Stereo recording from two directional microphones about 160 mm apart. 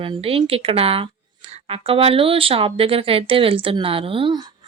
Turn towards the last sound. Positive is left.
turn(degrees=-30)  # may be behind; listen again after turning